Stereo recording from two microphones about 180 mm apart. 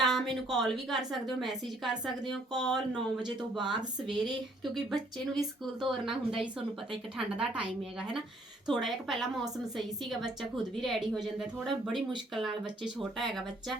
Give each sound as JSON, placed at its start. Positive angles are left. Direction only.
{"t": 0.0, "sound": "a woman's voice", "side_deg": 0}
{"t": 5.3, "sound": "speech", "side_deg": -25}
{"t": 5.9, "sound": "a woman's voice", "side_deg": -5}